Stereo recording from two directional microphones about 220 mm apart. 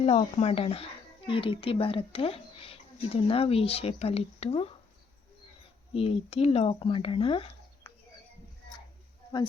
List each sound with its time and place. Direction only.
0.0 s speech: 30° left (ahead or behind)
5.9 s speech: 25° left (ahead or behind)